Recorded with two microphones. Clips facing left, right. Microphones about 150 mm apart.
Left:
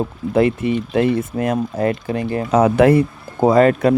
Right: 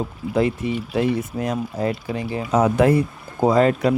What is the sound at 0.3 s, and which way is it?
Speech, 65° left (ahead or behind).